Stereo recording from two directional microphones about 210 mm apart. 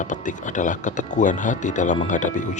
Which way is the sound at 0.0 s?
35° left (ahead or behind).